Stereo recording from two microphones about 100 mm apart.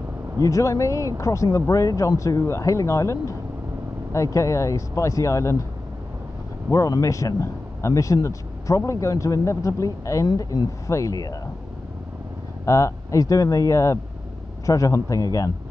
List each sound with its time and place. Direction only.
0.4 s a man's voice: 30° left (ahead or behind)
6.7 s a man's voice: 35° left (ahead or behind)
12.6 s a man's voice: 30° left (ahead or behind)